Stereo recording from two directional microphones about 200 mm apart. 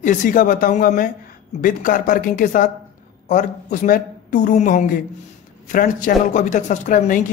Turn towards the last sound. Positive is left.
turn(degrees=40)  # may be behind; listen again after turning